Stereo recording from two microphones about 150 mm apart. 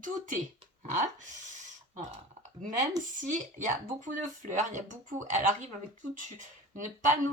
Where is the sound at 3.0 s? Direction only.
60° right (ahead or behind).